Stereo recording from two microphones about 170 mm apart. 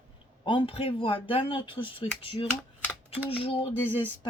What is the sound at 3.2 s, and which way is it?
Speech, 35° left (ahead or behind).